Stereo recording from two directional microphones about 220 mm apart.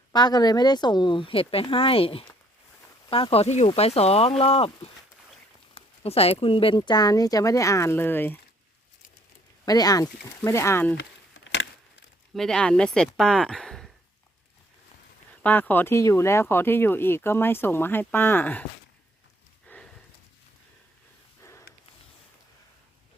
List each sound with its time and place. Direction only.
0.1 s speech: 20° left (ahead or behind)
9.6 s speech: 15° left (ahead or behind)
10.9 s a sound: 55° left (ahead or behind)
12.3 s speech: centre (ahead or behind)
15.4 s speech: 10° left (ahead or behind)
19.6 s a sound: 5° left (ahead or behind)